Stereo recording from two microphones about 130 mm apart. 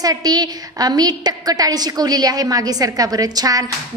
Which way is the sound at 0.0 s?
30° right (ahead or behind).